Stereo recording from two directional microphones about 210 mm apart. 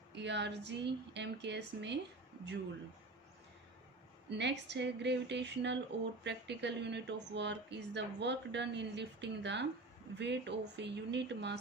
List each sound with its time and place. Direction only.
0.1 s speech: 55° right (ahead or behind)
4.3 s speech: 55° right (ahead or behind)